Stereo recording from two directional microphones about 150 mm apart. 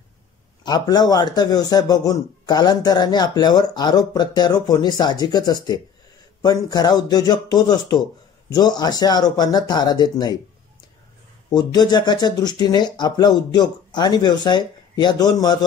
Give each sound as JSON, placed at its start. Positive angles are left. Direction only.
{"t": 0.7, "sound": "a man's voice", "side_deg": 25}
{"t": 11.5, "sound": "a man's voice", "side_deg": 25}